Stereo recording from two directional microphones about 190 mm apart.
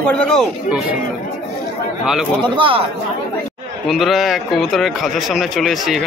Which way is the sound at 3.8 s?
Centre (ahead or behind).